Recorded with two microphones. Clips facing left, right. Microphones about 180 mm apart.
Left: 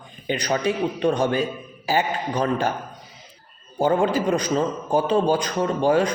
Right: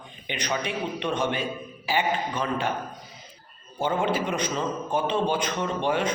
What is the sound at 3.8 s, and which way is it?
Speech, 40° left (ahead or behind).